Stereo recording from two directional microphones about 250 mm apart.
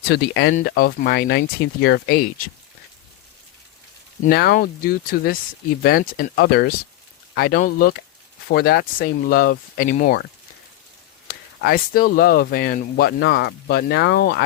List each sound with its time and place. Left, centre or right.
0.1 s speech: left
4.2 s speech: left
11.3 s speech: left